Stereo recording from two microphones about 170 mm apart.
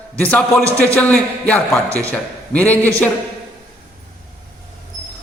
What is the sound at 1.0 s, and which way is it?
A man's voice, 5° left (ahead or behind).